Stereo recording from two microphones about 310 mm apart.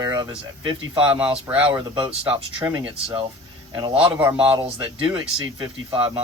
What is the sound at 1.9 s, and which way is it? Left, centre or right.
Speech, centre.